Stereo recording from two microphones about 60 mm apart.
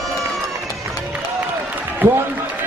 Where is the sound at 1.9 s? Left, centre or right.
Right.